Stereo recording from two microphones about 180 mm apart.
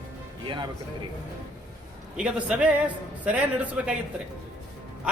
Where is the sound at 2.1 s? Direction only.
5° right (ahead or behind).